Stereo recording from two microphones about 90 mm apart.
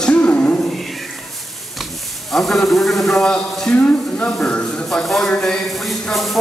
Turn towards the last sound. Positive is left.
turn(degrees=0)  # may be behind; listen again after turning